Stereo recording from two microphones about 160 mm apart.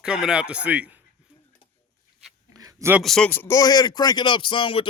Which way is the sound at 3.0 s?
5° left (ahead or behind).